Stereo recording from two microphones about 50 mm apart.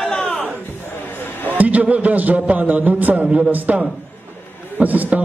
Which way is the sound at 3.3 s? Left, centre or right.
Right.